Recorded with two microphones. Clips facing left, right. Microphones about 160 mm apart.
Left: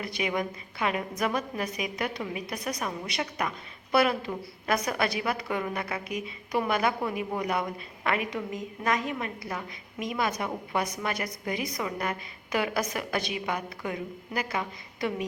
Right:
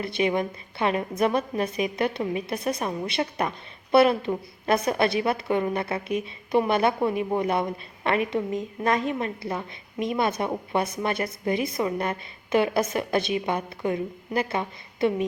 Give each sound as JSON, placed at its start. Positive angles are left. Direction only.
{"t": 0.0, "sound": "a woman's voice", "side_deg": -30}